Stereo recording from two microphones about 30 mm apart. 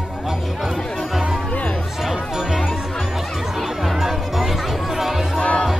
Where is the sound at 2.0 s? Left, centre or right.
Centre.